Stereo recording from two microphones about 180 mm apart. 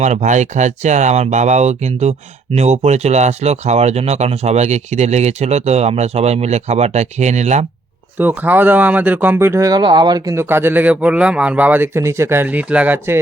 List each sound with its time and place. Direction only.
0.0 s speech: 40° right (ahead or behind)
8.2 s speech: 10° right (ahead or behind)